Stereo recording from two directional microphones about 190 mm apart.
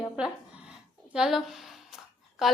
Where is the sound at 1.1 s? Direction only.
Centre (ahead or behind).